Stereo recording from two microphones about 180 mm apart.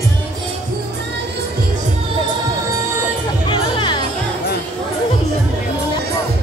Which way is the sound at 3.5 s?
25° left (ahead or behind).